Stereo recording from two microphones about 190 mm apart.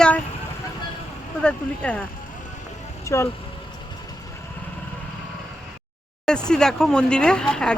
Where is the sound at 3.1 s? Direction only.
15° left (ahead or behind).